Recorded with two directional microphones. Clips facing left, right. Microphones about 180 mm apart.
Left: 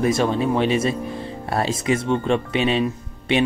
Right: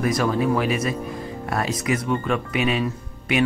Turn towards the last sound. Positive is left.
turn(degrees=30)  # may be behind; listen again after turning